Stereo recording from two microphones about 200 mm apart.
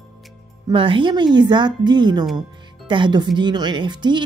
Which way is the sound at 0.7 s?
25° right (ahead or behind).